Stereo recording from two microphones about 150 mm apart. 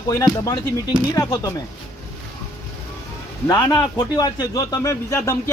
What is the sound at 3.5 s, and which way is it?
A man's voice, 20° left (ahead or behind).